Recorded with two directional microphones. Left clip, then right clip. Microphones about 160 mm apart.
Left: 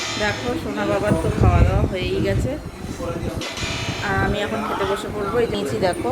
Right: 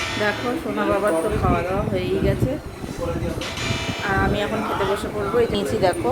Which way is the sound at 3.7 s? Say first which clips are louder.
Right 1 dB; centre (ahead or behind).